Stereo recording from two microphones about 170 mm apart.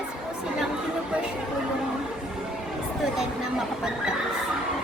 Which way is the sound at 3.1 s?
5° right (ahead or behind).